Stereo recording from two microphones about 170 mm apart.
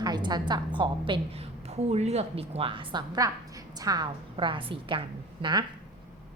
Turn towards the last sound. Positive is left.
turn(degrees=-30)  # may be behind; listen again after turning